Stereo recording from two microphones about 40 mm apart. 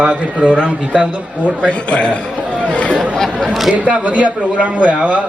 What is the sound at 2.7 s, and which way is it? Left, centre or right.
Chatter, left.